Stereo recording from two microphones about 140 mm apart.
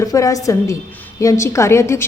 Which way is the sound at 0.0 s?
25° left (ahead or behind).